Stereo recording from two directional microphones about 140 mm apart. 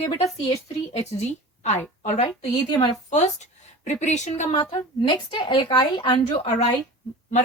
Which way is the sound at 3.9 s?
55° left (ahead or behind).